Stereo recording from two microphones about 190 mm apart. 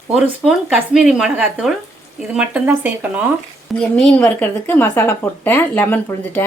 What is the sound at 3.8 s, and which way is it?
A woman's voice, 5° left (ahead or behind).